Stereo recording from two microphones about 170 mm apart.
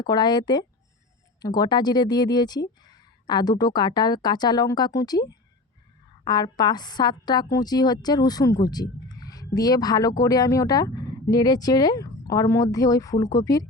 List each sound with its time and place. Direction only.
0.0 s a woman's voice: 25° left (ahead or behind)